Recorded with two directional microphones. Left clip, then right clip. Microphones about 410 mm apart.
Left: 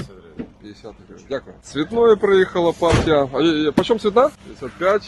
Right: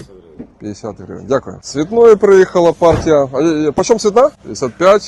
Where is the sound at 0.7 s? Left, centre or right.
Right.